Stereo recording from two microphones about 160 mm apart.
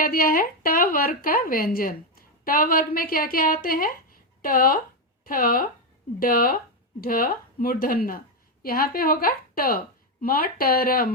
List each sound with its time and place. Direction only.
0.0 s a woman's voice: 65° left (ahead or behind)